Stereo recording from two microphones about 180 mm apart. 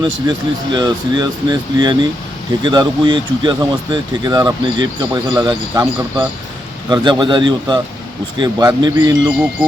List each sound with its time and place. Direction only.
0.0 s speech: 25° right (ahead or behind)